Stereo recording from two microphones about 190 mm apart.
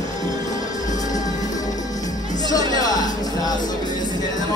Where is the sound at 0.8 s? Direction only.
40° left (ahead or behind).